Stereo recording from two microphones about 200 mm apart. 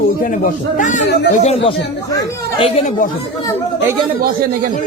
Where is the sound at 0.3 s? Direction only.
40° left (ahead or behind).